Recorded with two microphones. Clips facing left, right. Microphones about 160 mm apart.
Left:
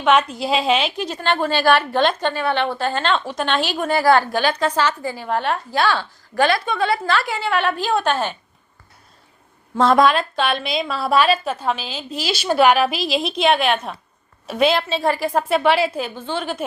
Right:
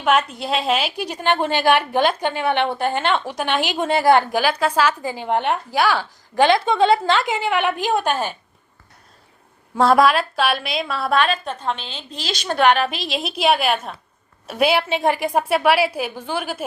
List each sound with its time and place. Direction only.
0.0 s a woman's voice: 5° right (ahead or behind)
5.1 s a woman's voice: 20° right (ahead or behind)
9.7 s a woman's voice: 5° right (ahead or behind)